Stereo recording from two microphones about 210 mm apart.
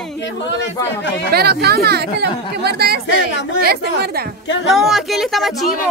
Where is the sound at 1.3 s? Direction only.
50° right (ahead or behind).